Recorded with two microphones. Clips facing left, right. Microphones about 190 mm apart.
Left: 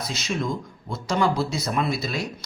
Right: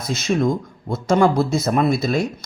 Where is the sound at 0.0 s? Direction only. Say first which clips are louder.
Right 8 dB; 50° right (ahead or behind).